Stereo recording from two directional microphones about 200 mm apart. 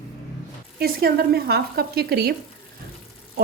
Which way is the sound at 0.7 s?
50° right (ahead or behind).